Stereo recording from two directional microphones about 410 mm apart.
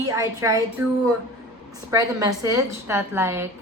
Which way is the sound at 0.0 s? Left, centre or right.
Centre.